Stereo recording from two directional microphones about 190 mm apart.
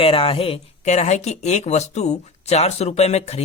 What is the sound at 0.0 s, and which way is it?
Speech, 30° left (ahead or behind).